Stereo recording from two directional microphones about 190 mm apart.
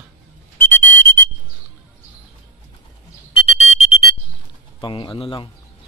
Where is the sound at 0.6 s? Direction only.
10° left (ahead or behind).